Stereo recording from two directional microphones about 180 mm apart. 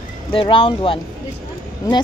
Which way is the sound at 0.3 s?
30° left (ahead or behind).